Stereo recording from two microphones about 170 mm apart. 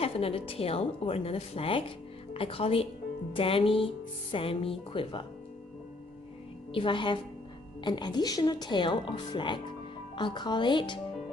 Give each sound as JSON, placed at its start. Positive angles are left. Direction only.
{"t": 0.0, "sound": "speech", "side_deg": 35}
{"t": 6.7, "sound": "speech", "side_deg": 30}